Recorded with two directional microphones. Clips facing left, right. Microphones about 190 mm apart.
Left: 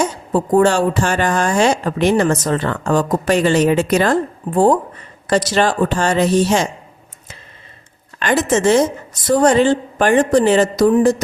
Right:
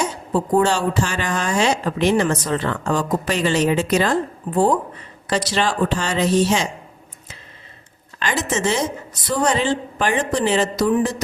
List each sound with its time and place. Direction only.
0.6 s speech: 50° left (ahead or behind)
8.2 s speech: 55° left (ahead or behind)